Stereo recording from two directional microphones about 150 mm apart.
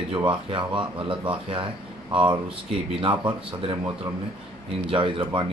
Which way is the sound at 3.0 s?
35° right (ahead or behind).